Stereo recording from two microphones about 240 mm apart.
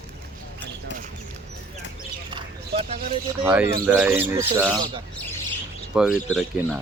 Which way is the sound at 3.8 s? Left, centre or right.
Centre.